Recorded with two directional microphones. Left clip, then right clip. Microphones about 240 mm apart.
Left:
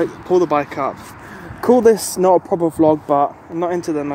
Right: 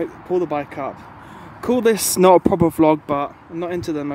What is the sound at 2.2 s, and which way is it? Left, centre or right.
Speech, right.